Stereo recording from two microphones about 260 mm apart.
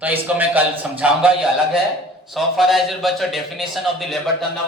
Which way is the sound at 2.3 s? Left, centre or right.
Centre.